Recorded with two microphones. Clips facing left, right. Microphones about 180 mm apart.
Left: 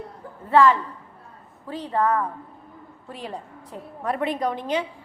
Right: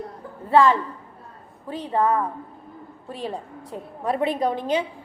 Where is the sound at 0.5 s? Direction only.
20° right (ahead or behind).